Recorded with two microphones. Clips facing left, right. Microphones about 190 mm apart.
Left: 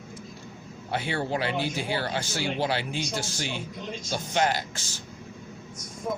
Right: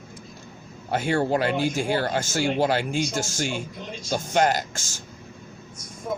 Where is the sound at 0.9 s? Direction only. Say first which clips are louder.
Right 6 dB; 45° right (ahead or behind).